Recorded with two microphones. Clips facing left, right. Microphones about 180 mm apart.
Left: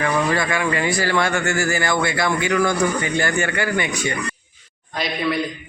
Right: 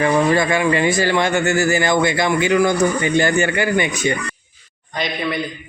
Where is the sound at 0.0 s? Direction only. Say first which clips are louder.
Right 5 dB; 25° right (ahead or behind).